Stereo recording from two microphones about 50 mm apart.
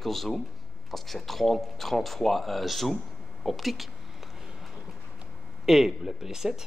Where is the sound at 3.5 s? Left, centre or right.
Centre.